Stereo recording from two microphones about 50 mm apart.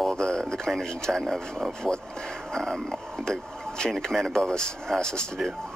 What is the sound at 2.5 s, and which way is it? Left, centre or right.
Speech, centre.